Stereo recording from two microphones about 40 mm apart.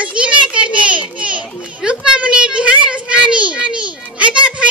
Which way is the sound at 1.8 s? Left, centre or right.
Right.